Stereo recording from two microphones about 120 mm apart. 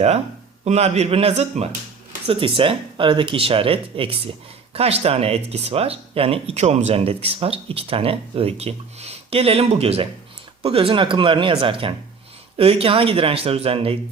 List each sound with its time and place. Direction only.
0.6 s speech: 65° right (ahead or behind)
2.2 s speech: 50° right (ahead or behind)